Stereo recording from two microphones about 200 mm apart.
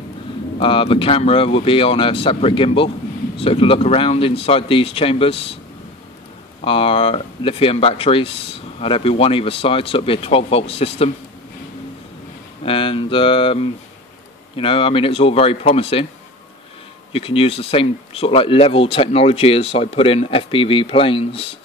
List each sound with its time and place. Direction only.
0.6 s speech: 25° left (ahead or behind)
6.6 s speech: 25° left (ahead or behind)
12.6 s speech: 25° left (ahead or behind)
17.1 s speech: 30° left (ahead or behind)